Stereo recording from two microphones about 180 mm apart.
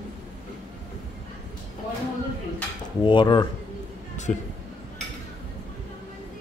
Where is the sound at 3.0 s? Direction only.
25° left (ahead or behind).